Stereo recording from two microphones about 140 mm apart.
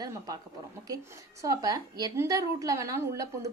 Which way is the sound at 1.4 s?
25° right (ahead or behind).